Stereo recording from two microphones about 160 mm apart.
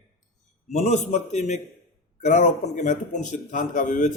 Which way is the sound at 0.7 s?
45° left (ahead or behind).